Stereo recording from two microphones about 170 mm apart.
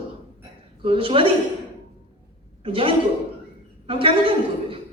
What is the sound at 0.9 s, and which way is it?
Speech, 30° right (ahead or behind).